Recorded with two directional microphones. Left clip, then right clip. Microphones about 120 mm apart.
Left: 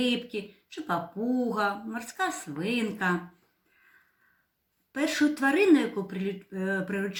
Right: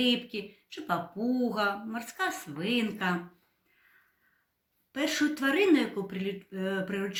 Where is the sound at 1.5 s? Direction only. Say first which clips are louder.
Left 1 dB; 15° right (ahead or behind).